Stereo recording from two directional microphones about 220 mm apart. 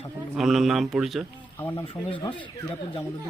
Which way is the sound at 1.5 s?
10° left (ahead or behind).